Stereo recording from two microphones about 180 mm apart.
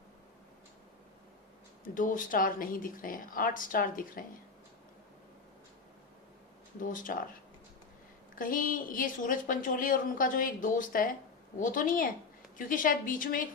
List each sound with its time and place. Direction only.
2.0 s a woman's voice: 50° left (ahead or behind)
6.8 s a woman's voice: 50° left (ahead or behind)
8.4 s a woman's voice: 50° left (ahead or behind)